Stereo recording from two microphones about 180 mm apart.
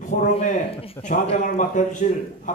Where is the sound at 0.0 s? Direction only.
40° left (ahead or behind).